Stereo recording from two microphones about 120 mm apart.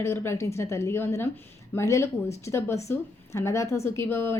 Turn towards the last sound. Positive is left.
turn(degrees=20)  # may be behind; listen again after turning